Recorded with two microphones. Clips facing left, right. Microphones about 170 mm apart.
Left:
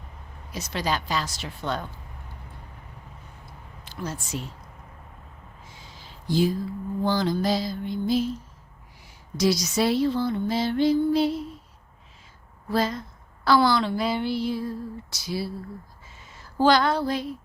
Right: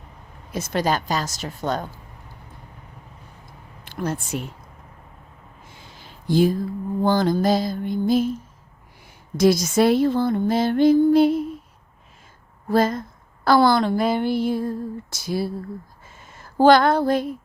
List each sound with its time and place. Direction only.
0.5 s a woman's voice: 50° right (ahead or behind)
3.8 s speech: 55° right (ahead or behind)
5.6 s a sound: 55° right (ahead or behind)
7.0 s a woman's voice: 50° right (ahead or behind)
9.4 s a woman's voice: 50° right (ahead or behind)
12.6 s a woman's voice: 50° right (ahead or behind)
16.0 s a sound: 50° right (ahead or behind)